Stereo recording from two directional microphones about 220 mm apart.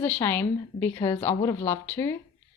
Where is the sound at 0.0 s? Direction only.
10° left (ahead or behind).